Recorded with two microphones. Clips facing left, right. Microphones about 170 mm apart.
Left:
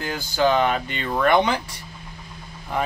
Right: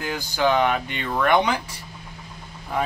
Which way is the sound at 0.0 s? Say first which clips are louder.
Left 1 dB; 15° right (ahead or behind).